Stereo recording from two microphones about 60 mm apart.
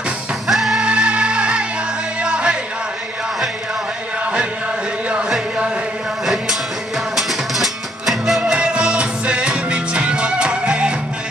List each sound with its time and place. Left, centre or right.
0.5 s music: centre
0.7 s music: centre
6.2 s music: centre
8.4 s music: centre